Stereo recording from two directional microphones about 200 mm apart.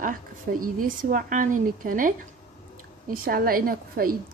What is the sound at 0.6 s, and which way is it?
A woman's voice, 45° right (ahead or behind).